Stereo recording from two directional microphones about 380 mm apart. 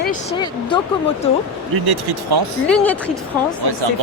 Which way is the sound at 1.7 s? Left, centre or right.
Right.